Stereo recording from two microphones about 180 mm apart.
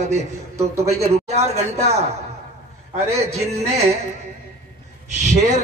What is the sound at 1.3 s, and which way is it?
Speech, 35° right (ahead or behind).